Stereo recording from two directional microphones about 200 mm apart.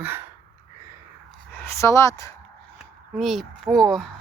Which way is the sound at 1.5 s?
15° left (ahead or behind).